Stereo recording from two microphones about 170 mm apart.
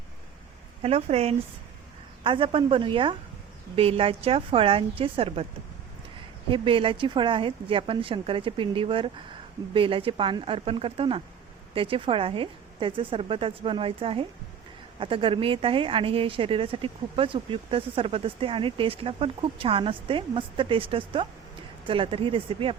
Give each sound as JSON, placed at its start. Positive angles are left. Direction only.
{"t": 0.8, "sound": "speech", "side_deg": -35}
{"t": 6.5, "sound": "speech", "side_deg": -30}